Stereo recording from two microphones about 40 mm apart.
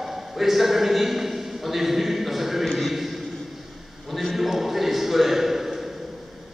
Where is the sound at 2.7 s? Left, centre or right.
Centre.